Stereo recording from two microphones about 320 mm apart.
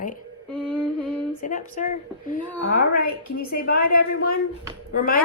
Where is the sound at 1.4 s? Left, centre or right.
Left.